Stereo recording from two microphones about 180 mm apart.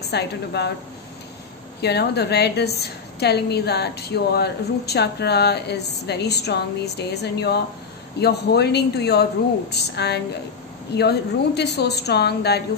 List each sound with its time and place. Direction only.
0.1 s a woman's voice: 65° left (ahead or behind)
1.8 s a woman's voice: 65° left (ahead or behind)